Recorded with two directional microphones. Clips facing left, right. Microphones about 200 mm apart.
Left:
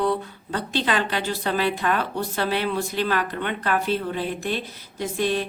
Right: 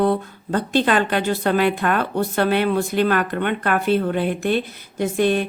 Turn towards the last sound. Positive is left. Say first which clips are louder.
# right 5 dB
turn(degrees=-55)  # may be behind; listen again after turning